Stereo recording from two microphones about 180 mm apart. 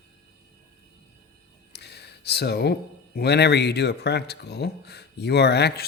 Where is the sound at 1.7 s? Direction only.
65° left (ahead or behind).